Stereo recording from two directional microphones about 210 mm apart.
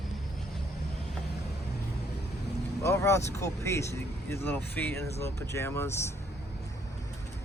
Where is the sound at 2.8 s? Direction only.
15° left (ahead or behind).